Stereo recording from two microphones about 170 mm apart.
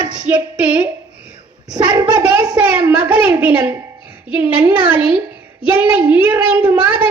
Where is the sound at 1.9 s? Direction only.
25° right (ahead or behind).